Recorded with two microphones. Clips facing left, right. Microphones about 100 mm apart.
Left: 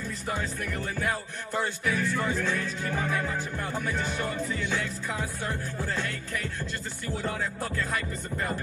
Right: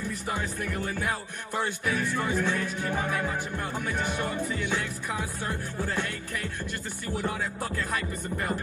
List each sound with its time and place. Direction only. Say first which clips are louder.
0.0 s music: right 1 dB; 20° right (ahead or behind)